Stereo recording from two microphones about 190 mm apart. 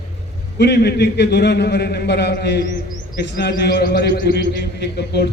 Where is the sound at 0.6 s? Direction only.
60° left (ahead or behind).